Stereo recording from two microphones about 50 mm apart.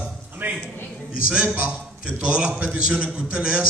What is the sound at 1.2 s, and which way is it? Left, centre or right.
Speech, right.